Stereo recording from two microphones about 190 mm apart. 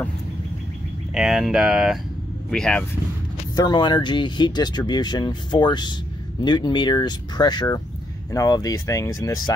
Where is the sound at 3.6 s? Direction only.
20° left (ahead or behind).